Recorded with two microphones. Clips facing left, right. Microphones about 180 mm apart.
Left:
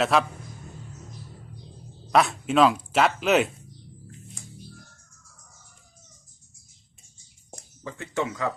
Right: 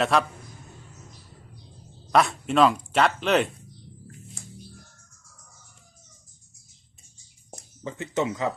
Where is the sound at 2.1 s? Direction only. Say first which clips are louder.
Even; centre (ahead or behind).